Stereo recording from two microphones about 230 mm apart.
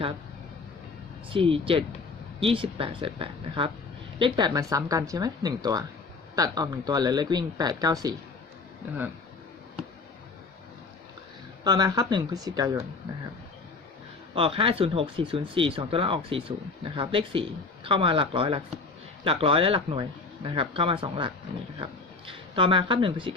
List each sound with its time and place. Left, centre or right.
1.3 s speech: right
11.6 s speech: centre
14.3 s speech: right